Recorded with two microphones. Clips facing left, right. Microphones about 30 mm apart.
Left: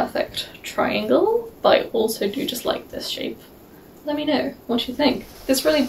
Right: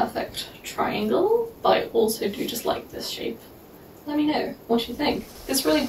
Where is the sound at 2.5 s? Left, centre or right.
Left.